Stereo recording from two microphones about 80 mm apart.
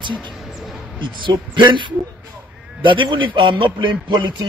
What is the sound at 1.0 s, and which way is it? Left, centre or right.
A man's voice, right.